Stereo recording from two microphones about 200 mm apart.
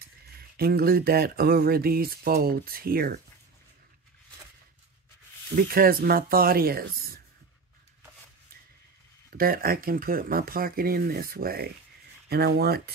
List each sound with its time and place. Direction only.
0.4 s speech: 50° right (ahead or behind)
5.6 s speech: 50° right (ahead or behind)
9.4 s speech: 50° right (ahead or behind)